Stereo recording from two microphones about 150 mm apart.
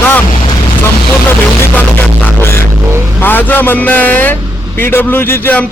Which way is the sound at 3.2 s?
10° left (ahead or behind).